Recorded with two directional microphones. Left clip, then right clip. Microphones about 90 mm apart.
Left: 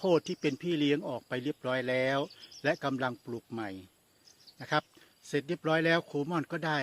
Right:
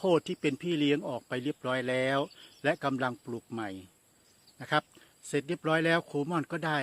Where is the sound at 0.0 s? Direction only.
35° right (ahead or behind).